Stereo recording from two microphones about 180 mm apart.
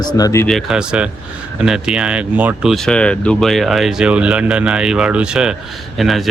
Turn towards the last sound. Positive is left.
turn(degrees=0)  # may be behind; listen again after turning